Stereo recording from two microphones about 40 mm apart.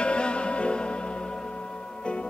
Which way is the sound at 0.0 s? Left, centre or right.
Left.